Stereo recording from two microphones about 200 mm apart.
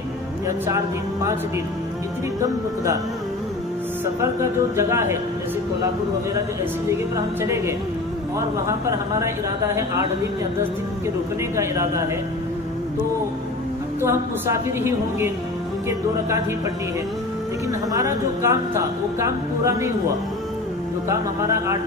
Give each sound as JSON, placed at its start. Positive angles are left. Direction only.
{"t": 0.7, "sound": "speech", "side_deg": -15}
{"t": 4.0, "sound": "speech", "side_deg": -15}
{"t": 7.4, "sound": "speech", "side_deg": -15}
{"t": 11.5, "sound": "speech", "side_deg": -15}
{"t": 14.0, "sound": "speech", "side_deg": -15}
{"t": 17.9, "sound": "speech", "side_deg": -15}
{"t": 21.1, "sound": "speech", "side_deg": -15}